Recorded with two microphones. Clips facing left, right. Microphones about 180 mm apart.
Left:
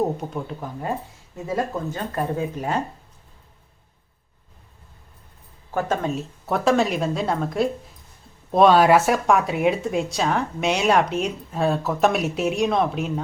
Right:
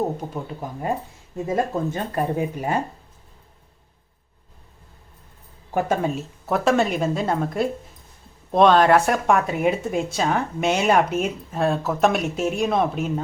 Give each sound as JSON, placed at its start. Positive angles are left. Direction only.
{"t": 0.2, "sound": "speech", "side_deg": -15}
{"t": 5.7, "sound": "speech", "side_deg": -10}
{"t": 6.1, "sound": "speech", "side_deg": 0}